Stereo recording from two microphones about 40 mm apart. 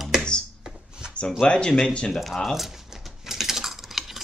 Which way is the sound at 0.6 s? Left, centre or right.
Right.